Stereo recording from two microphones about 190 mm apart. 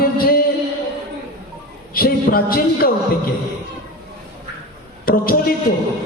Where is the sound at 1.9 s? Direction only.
50° left (ahead or behind).